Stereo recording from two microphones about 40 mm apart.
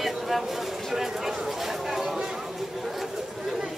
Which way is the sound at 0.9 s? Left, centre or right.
Centre.